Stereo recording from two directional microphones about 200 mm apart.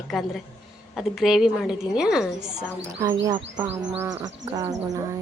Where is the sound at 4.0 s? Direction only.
20° right (ahead or behind).